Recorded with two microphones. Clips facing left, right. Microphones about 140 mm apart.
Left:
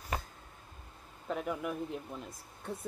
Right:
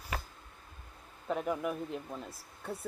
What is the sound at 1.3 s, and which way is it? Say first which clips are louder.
Speech: right 2 dB; centre (ahead or behind).